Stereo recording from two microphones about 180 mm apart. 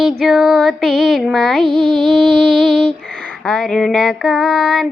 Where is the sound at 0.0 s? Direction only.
Centre (ahead or behind).